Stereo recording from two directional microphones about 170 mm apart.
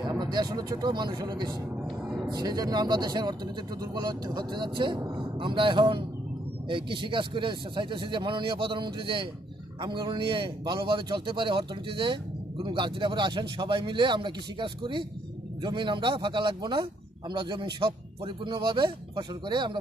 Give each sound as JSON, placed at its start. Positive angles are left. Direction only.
{"t": 0.0, "sound": "a man's voice", "side_deg": -25}